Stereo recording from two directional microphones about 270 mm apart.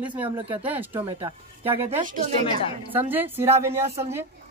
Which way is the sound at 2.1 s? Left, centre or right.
Right.